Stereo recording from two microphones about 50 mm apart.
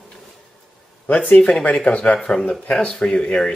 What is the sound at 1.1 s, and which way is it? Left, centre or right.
Speech, left.